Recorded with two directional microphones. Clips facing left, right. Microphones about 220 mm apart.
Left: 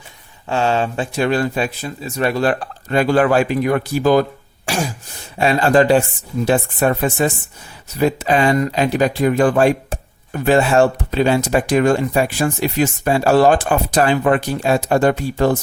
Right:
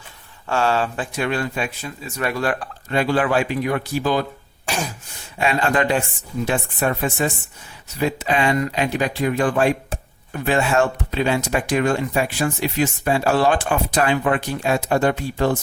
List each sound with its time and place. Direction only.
0.4 s speech: 20° left (ahead or behind)
2.9 s speech: 45° left (ahead or behind)
5.4 s speech: 35° left (ahead or behind)